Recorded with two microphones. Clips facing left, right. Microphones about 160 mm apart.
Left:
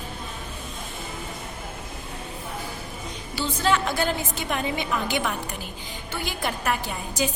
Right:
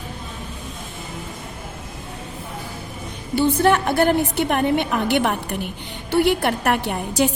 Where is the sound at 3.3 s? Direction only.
55° right (ahead or behind).